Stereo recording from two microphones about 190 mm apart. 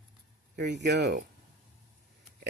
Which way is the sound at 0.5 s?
65° right (ahead or behind).